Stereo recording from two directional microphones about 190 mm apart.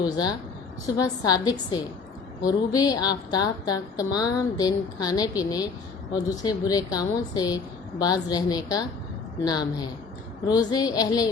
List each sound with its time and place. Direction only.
0.0 s a woman's voice: 20° left (ahead or behind)